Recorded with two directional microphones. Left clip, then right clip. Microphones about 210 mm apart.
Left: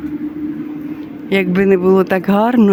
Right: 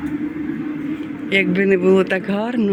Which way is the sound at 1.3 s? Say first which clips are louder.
Left 3 dB; 25° left (ahead or behind).